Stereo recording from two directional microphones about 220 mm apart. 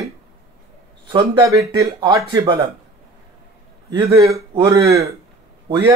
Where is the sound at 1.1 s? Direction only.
20° right (ahead or behind).